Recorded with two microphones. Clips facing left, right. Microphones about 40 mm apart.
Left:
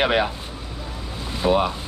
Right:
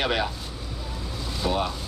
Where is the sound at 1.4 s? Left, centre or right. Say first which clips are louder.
Left 7 dB; left.